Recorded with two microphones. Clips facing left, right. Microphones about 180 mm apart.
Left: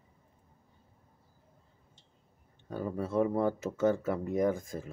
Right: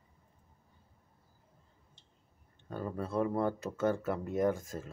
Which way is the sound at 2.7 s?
5° left (ahead or behind).